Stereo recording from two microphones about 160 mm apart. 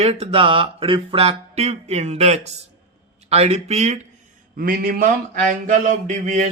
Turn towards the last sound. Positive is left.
turn(degrees=-50)  # may be behind; listen again after turning